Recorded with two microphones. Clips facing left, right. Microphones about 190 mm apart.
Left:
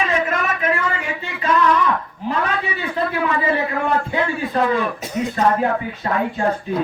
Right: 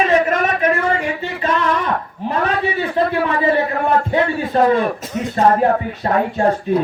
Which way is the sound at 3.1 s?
40° right (ahead or behind).